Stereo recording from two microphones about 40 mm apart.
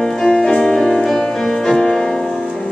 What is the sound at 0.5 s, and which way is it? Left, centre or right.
Music, centre.